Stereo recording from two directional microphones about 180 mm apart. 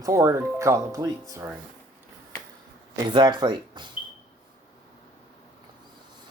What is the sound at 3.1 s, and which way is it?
Speech, 25° right (ahead or behind).